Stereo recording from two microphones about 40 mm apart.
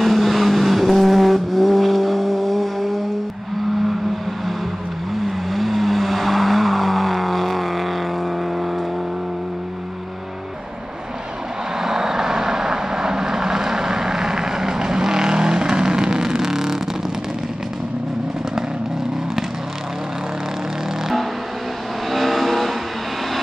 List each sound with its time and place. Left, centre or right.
0.0 s vehicle: centre
5.1 s vehicle: centre
11.8 s vehicle: centre
22.1 s vehicle: centre